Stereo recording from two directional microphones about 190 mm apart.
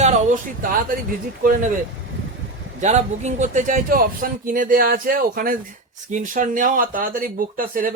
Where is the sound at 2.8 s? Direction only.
35° right (ahead or behind).